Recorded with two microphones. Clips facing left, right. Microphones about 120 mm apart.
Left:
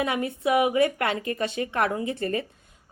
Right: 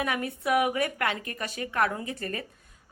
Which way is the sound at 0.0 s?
25° left (ahead or behind).